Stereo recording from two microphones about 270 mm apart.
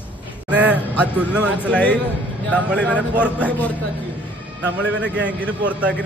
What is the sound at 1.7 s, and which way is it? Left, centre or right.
A man's voice, centre.